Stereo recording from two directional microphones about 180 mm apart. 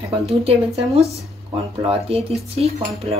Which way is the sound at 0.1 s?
35° right (ahead or behind).